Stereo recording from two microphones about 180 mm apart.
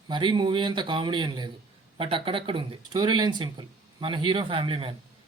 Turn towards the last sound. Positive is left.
turn(degrees=-30)  # may be behind; listen again after turning